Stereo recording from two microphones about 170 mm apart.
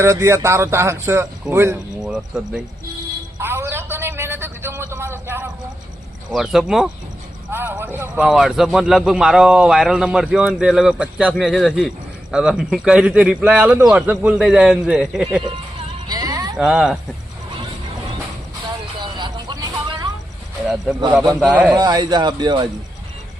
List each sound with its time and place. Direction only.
0.0 s a man's voice: 15° right (ahead or behind)
3.3 s a sound: 15° right (ahead or behind)
6.3 s a man's voice: centre (ahead or behind)
7.5 s a man's voice: 10° right (ahead or behind)
16.0 s a sound: 20° right (ahead or behind)
16.6 s a man's voice: 5° right (ahead or behind)
19.0 s vehicle: 25° right (ahead or behind)
21.1 s a man's voice: centre (ahead or behind)
21.8 s speech: 25° right (ahead or behind)